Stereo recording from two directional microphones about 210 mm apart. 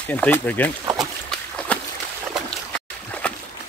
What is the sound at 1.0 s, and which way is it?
Boat, 5° left (ahead or behind).